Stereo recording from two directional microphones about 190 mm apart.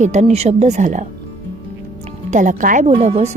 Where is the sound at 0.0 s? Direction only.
40° right (ahead or behind).